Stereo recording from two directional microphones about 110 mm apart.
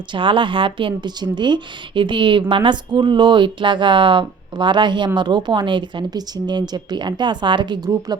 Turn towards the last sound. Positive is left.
turn(degrees=-45)  # may be behind; listen again after turning